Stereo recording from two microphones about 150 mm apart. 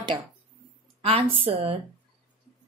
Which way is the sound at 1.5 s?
40° right (ahead or behind).